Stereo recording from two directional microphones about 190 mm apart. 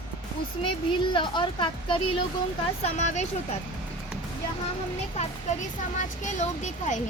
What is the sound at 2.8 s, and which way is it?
Speech, 35° left (ahead or behind).